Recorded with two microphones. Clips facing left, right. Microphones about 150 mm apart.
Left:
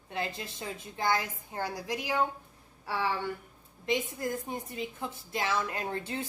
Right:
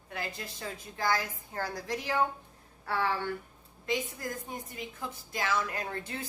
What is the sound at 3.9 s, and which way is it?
A woman's voice, 25° left (ahead or behind).